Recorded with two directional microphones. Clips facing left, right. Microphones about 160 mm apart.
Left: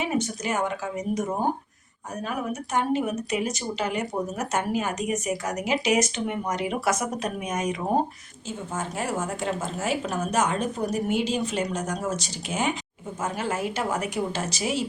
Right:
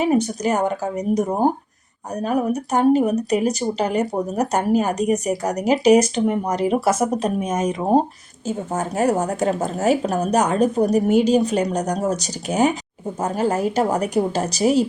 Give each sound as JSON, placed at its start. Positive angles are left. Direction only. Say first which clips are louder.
{"t": 0.0, "sound": "speech", "louder": "right 8 dB", "side_deg": -40}